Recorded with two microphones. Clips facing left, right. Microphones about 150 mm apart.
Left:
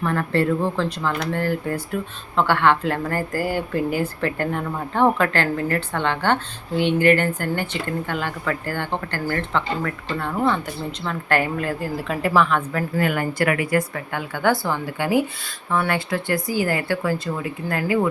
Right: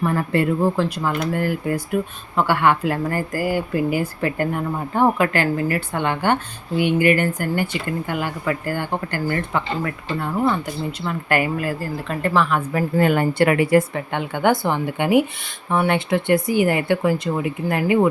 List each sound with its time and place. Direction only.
0.0 s a woman's voice: 10° right (ahead or behind)
13.0 s speech: 30° right (ahead or behind)